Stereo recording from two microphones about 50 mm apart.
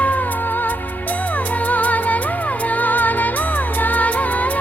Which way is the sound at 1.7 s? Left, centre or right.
Left.